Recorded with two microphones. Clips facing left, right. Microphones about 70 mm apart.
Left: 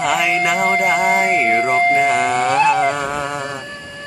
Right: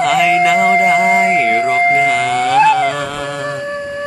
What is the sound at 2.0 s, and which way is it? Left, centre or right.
Music, left.